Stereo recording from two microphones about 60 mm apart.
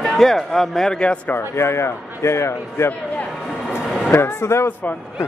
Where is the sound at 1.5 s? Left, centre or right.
Left.